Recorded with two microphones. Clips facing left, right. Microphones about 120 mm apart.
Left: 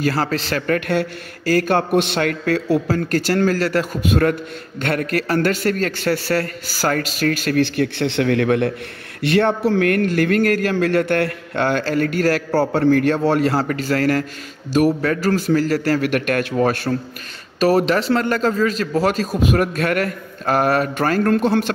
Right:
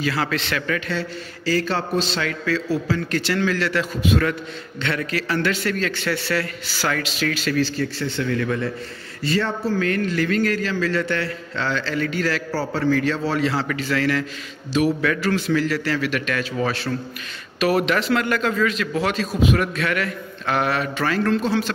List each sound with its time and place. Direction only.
0.0 s a man's voice: 40° left (ahead or behind)
0.7 s a man's voice: 55° left (ahead or behind)
17.6 s a man's voice: 35° left (ahead or behind); by 21.7 s 55° left (ahead or behind)